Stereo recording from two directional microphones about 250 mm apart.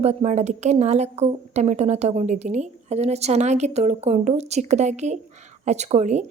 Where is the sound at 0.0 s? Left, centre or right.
Right.